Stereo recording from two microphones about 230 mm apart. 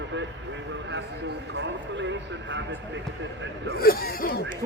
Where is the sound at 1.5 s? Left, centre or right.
Right.